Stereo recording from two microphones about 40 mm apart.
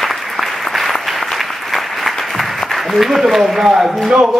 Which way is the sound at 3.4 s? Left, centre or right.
Centre.